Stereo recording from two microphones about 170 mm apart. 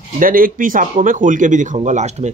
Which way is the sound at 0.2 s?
55° right (ahead or behind).